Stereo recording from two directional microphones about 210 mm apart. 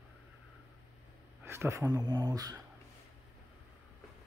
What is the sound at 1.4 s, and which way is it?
Speech, 10° right (ahead or behind).